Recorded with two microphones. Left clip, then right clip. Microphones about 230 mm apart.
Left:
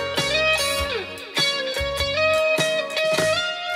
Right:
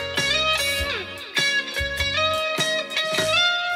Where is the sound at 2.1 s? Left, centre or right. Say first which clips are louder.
Left 5 dB; right.